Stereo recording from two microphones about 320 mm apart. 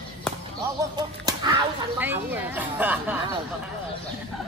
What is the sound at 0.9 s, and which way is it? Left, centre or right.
Speech, centre.